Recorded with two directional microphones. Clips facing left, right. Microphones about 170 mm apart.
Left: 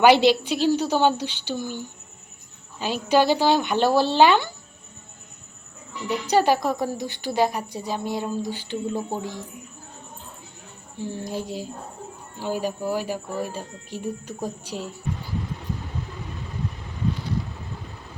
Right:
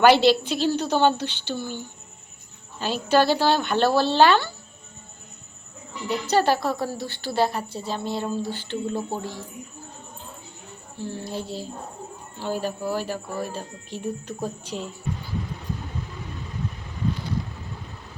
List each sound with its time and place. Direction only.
0.0 s a woman's voice: 15° left (ahead or behind)
6.2 s a woman's voice: 15° left (ahead or behind)
10.9 s a woman's voice: 15° left (ahead or behind)